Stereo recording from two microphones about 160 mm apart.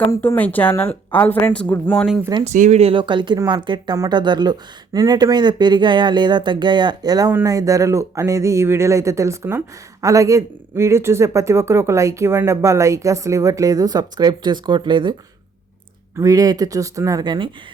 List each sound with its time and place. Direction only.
0.1 s speech: 15° left (ahead or behind)
2.4 s speech: 45° right (ahead or behind); by 15.1 s 30° right (ahead or behind)
16.1 s speech: 20° right (ahead or behind)